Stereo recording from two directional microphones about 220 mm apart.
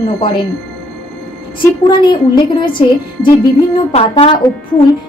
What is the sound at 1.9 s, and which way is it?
Speech, 20° left (ahead or behind).